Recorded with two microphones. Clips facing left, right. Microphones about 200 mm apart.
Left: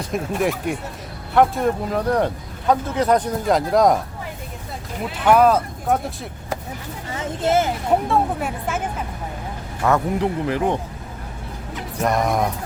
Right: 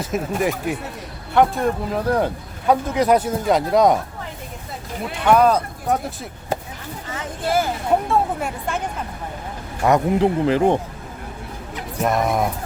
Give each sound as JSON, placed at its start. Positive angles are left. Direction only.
{"t": 0.0, "sound": "a man's voice", "side_deg": 0}
{"t": 5.2, "sound": "a man's voice", "side_deg": 5}
{"t": 7.4, "sound": "speech", "side_deg": 20}
{"t": 8.1, "sound": "a man's voice", "side_deg": 0}
{"t": 9.8, "sound": "speech", "side_deg": -15}
{"t": 10.2, "sound": "speech", "side_deg": -30}
{"t": 12.0, "sound": "a man's voice", "side_deg": 0}